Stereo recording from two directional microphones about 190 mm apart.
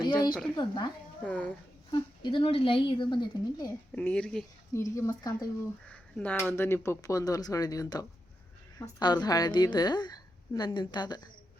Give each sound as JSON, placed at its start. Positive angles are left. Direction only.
{"t": 0.0, "sound": "a sound", "side_deg": 20}
{"t": 0.5, "sound": "a woman's voice", "side_deg": 25}
{"t": 1.2, "sound": "speech", "side_deg": 10}
{"t": 1.9, "sound": "a woman's voice", "side_deg": 25}
{"t": 3.9, "sound": "speech", "side_deg": 5}
{"t": 4.7, "sound": "speech", "side_deg": 15}
{"t": 5.9, "sound": "a woman's voice", "side_deg": 5}